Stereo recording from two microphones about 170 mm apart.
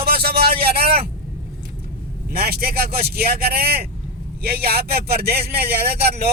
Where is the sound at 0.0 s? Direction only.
65° right (ahead or behind).